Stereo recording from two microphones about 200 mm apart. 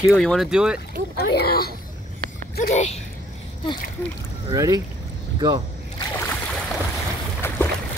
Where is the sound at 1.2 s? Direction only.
55° left (ahead or behind).